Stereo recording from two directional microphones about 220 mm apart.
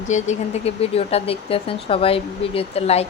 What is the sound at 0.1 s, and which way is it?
Speech, 30° left (ahead or behind).